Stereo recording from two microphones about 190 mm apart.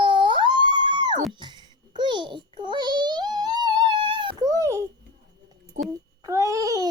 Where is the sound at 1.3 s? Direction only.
25° right (ahead or behind).